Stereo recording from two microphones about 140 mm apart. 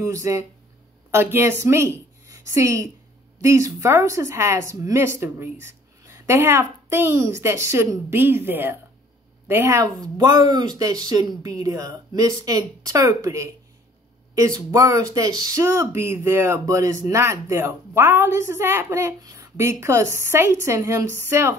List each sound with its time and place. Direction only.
0.0 s a woman's voice: 25° right (ahead or behind)